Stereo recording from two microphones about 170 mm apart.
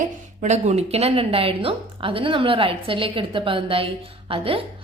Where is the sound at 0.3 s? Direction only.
40° right (ahead or behind).